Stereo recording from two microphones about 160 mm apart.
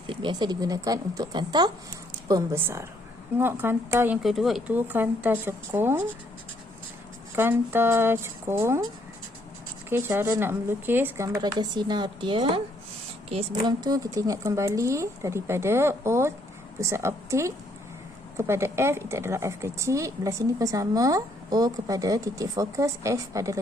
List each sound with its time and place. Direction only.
0.1 s a woman's voice: 30° right (ahead or behind); by 4.2 s 15° right (ahead or behind)
4.2 s speech: centre (ahead or behind)
4.7 s speech: 10° right (ahead or behind)
7.3 s speech: 15° right (ahead or behind)
9.9 s a woman's voice: 15° right (ahead or behind); by 12.6 s 35° right (ahead or behind)
13.7 s a woman's voice: 25° right (ahead or behind)